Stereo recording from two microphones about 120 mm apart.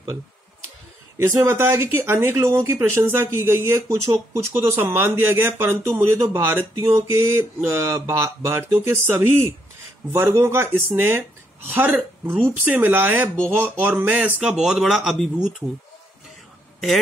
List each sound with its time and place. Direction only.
1.1 s speech: 25° right (ahead or behind); by 15.5 s 5° right (ahead or behind)